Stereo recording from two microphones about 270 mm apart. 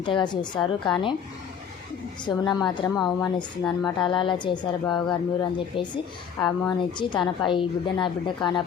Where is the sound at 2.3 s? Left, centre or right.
Centre.